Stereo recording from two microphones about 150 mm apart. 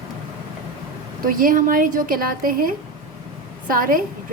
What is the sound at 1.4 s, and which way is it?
A woman's voice, 70° right (ahead or behind).